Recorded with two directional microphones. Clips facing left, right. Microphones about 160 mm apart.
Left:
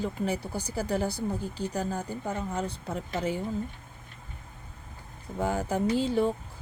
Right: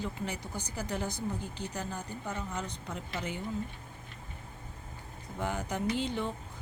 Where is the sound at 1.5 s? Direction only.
35° left (ahead or behind).